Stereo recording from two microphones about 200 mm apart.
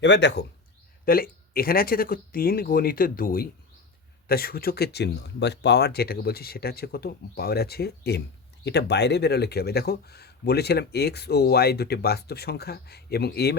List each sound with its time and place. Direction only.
0.0 s speech: 60° left (ahead or behind)
1.0 s speech: 50° left (ahead or behind)